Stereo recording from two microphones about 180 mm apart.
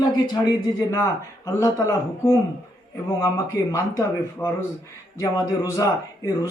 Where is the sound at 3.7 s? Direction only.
15° left (ahead or behind).